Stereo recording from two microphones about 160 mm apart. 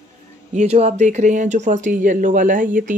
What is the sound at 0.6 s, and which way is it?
Speech, 45° right (ahead or behind).